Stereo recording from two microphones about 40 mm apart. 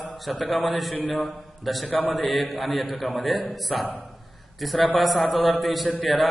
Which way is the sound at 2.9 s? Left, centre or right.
Left.